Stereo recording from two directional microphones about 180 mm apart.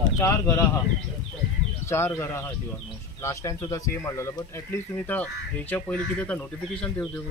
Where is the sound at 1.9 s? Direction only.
15° left (ahead or behind).